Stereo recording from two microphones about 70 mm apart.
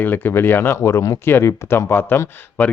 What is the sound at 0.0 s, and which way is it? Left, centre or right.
Speech, left.